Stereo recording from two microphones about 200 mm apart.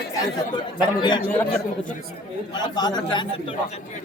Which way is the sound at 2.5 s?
20° left (ahead or behind).